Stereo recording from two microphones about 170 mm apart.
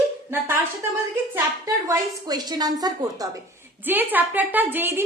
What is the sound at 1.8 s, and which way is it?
A woman's voice, 25° right (ahead or behind).